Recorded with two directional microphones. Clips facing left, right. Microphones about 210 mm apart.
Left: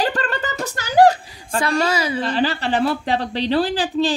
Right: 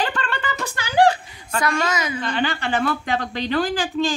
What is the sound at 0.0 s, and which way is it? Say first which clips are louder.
A woman's voice: left 3 dB; 40° left (ahead or behind).